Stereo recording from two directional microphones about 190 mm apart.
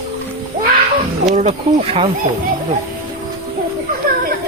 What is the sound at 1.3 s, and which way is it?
Speech, 35° right (ahead or behind).